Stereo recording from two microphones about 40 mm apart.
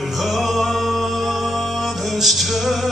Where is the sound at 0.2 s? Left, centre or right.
Centre.